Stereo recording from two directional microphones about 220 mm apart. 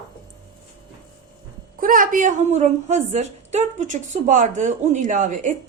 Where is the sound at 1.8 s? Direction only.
40° right (ahead or behind).